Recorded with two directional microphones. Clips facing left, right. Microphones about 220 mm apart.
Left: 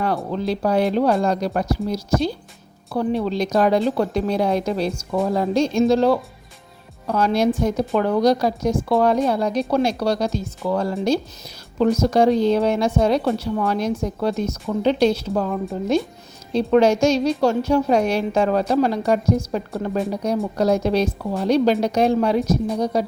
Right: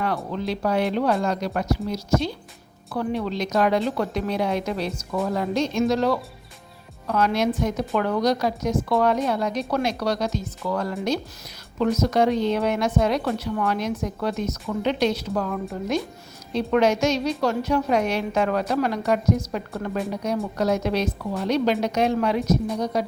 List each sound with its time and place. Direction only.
0.3 s a woman's voice: 35° left (ahead or behind)
2.9 s a woman's voice: 30° left (ahead or behind)